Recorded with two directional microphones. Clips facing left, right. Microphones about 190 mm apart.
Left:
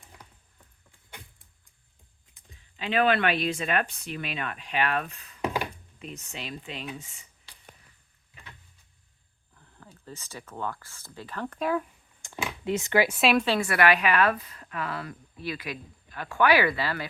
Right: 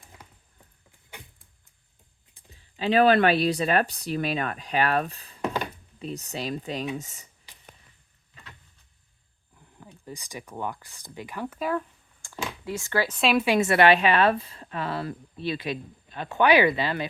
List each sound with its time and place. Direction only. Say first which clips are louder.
2.3 s speech: right 3 dB; 35° right (ahead or behind)
9.6 s a sound: right 3 dB; 15° right (ahead or behind)
10.1 s speech: right 3 dB; 15° right (ahead or behind)
12.2 s speech: left 1 dB; 20° left (ahead or behind)
13.3 s speech: right 2 dB; 10° right (ahead or behind)
13.6 s a woman's voice: right 4 dB; 25° right (ahead or behind)